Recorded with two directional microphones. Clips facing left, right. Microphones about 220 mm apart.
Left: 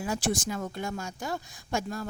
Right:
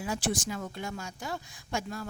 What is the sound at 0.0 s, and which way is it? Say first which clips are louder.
A woman's voice: left 2 dB; 45° left (ahead or behind).